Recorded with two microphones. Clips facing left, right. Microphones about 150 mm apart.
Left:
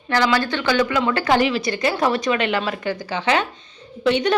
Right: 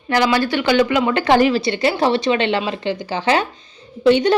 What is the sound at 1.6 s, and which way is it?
A woman's voice, 30° right (ahead or behind).